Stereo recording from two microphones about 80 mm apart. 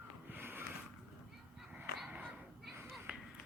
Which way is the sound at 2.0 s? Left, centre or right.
Centre.